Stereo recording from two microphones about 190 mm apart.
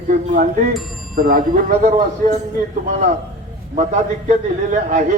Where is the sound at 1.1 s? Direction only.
50° right (ahead or behind).